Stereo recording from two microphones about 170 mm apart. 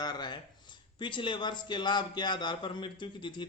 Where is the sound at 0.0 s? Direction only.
25° left (ahead or behind).